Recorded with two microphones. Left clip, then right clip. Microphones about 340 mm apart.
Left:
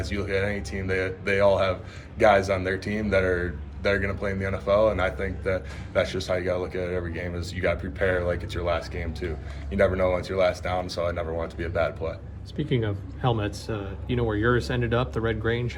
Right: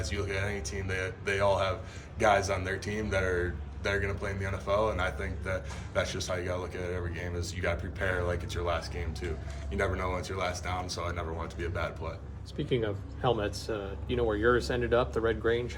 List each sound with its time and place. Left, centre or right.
0.0 s speech: centre
12.5 s speech: centre